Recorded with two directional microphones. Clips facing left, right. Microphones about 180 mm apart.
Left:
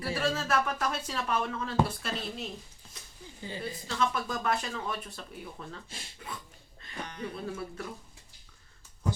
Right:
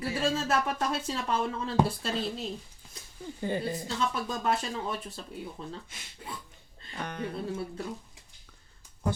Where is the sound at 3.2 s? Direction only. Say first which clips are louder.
Right 7 dB; 55° right (ahead or behind).